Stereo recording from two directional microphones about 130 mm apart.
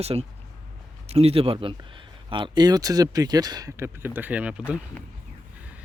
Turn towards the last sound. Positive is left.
turn(degrees=-10)  # may be behind; listen again after turning